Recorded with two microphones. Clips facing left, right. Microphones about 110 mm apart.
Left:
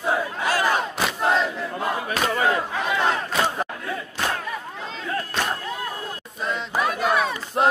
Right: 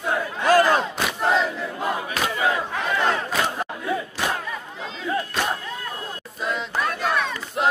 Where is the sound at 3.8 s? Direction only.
15° right (ahead or behind).